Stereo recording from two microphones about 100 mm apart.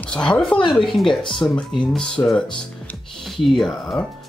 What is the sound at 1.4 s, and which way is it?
Speech, 40° left (ahead or behind).